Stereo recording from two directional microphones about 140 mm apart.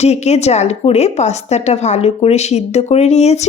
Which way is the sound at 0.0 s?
50° left (ahead or behind).